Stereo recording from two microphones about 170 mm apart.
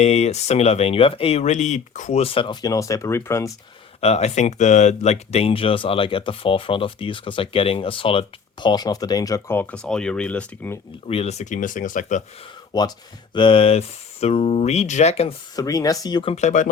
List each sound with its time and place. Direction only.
0.0 s speech: 40° left (ahead or behind); by 3.5 s 15° left (ahead or behind)
4.0 s speech: 40° left (ahead or behind); by 10.8 s 10° left (ahead or behind)
11.1 s speech: 40° left (ahead or behind)
12.7 s speech: 25° left (ahead or behind)
15.5 s speech: 20° left (ahead or behind)
16.3 s speech: 45° left (ahead or behind)